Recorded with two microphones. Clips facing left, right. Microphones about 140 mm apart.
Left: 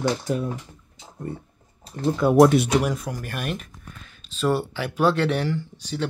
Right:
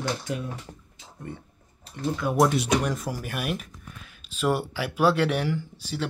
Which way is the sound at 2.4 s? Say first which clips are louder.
Left 6 dB; 60° left (ahead or behind).